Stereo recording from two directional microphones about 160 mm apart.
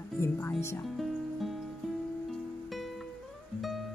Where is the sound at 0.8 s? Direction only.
Centre (ahead or behind).